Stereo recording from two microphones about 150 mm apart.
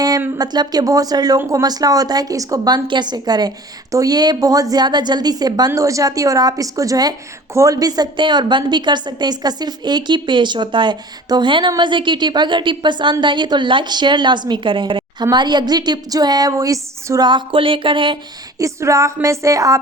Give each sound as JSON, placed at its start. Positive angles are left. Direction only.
{"t": 0.2, "sound": "a woman's voice", "side_deg": -25}
{"t": 18.6, "sound": "a woman's voice", "side_deg": -20}